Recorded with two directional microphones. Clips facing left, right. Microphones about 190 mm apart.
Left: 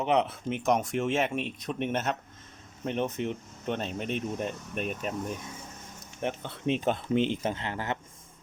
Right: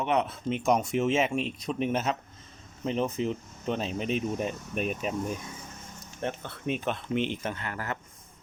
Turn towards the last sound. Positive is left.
turn(degrees=25)  # may be behind; listen again after turning